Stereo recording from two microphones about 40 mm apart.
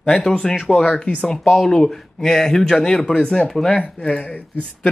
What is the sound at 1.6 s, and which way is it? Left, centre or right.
Speech, centre.